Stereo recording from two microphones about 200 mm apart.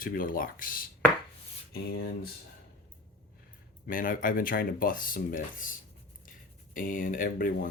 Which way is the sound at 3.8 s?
45° left (ahead or behind).